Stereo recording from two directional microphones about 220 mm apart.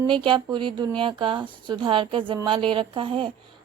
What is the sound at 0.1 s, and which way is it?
A woman's voice, 20° right (ahead or behind).